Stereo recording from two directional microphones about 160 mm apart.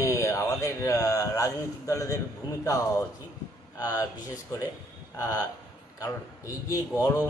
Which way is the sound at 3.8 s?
20° left (ahead or behind).